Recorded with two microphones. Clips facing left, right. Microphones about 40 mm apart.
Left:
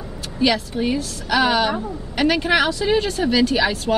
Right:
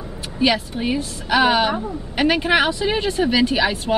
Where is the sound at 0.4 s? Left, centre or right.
Centre.